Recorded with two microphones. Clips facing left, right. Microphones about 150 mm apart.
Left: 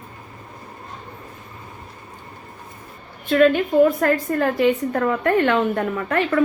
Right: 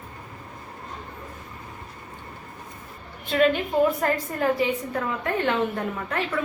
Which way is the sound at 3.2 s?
55° left (ahead or behind).